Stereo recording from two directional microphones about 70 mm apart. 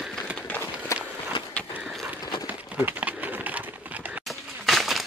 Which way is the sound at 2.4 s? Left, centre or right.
Right.